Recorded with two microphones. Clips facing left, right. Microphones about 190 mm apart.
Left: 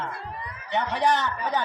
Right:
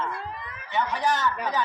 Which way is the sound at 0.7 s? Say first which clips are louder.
Left 2 dB; 65° left (ahead or behind).